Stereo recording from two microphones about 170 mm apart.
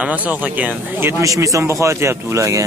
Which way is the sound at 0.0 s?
10° right (ahead or behind).